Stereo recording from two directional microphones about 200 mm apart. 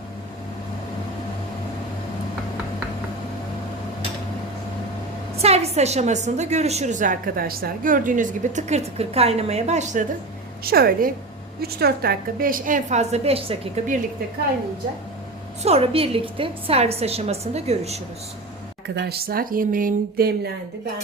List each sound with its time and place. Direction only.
5.4 s a woman's voice: 30° right (ahead or behind)
10.6 s a woman's voice: 50° right (ahead or behind)
15.6 s a woman's voice: 30° right (ahead or behind)
18.9 s speech: 50° right (ahead or behind)